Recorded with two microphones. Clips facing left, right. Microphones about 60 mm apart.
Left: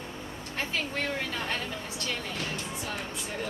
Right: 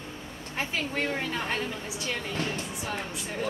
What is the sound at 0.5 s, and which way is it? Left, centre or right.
A woman's voice, centre.